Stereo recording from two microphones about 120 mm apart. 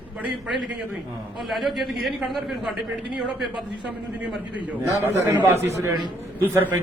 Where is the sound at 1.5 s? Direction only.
Centre (ahead or behind).